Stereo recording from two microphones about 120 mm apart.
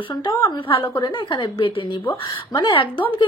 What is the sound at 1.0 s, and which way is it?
A woman's voice, 45° left (ahead or behind).